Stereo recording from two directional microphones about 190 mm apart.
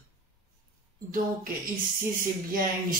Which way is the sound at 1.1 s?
50° right (ahead or behind).